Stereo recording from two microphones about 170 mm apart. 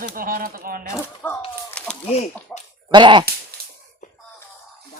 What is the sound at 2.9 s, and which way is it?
Speech, 30° right (ahead or behind).